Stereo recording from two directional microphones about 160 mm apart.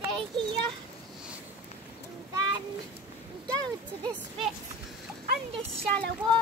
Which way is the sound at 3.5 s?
25° right (ahead or behind).